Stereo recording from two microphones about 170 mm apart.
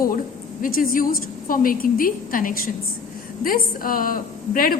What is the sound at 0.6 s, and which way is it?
A woman's voice, 55° left (ahead or behind).